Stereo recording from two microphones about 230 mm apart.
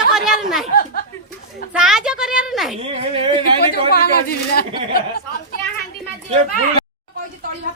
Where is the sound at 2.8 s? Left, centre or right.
Right.